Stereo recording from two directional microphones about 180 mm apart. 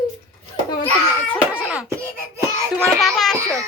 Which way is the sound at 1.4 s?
5° right (ahead or behind).